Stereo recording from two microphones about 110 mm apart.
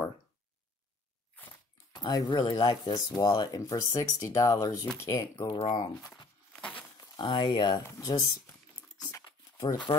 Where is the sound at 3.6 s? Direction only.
30° left (ahead or behind).